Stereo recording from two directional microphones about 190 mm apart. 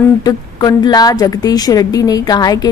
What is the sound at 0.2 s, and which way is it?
A woman's voice, 20° left (ahead or behind).